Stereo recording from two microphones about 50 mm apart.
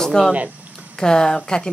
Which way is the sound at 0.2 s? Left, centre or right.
Centre.